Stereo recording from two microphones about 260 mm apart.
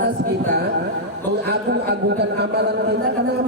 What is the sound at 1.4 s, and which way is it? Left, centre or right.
A man's voice, right.